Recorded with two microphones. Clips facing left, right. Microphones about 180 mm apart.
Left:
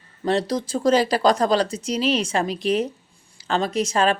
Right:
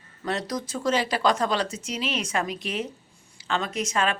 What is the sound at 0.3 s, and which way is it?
Speech, 30° left (ahead or behind).